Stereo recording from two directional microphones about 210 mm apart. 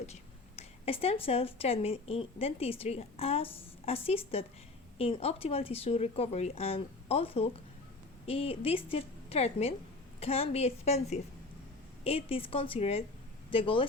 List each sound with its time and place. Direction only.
0.0 s speech: 30° left (ahead or behind)